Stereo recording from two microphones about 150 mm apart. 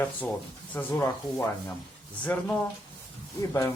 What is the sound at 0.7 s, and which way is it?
Speech, 10° left (ahead or behind).